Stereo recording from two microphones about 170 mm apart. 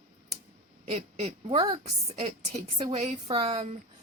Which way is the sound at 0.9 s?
35° right (ahead or behind).